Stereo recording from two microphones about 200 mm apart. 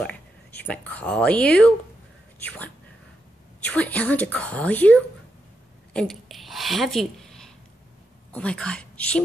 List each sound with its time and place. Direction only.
0.6 s a woman's voice: 10° left (ahead or behind)
3.7 s a woman's voice: 5° left (ahead or behind)
5.9 s a sound: centre (ahead or behind)
8.3 s a woman's voice: 5° left (ahead or behind)